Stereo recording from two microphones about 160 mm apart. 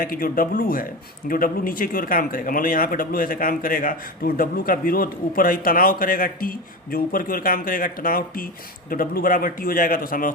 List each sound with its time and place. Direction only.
0.0 s speech: 65° left (ahead or behind)